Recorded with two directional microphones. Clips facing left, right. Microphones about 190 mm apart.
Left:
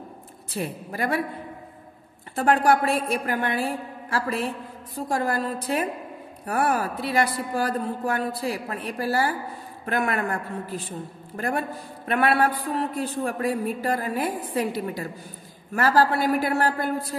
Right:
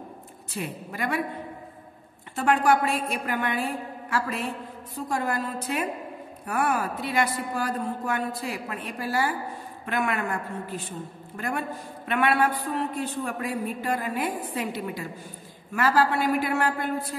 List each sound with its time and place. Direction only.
0.6 s speech: 35° left (ahead or behind)
2.3 s speech: 35° left (ahead or behind)